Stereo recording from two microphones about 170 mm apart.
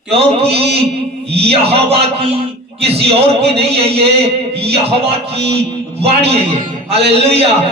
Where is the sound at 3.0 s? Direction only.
35° right (ahead or behind).